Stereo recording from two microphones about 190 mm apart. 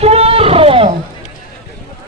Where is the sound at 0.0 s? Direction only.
30° right (ahead or behind).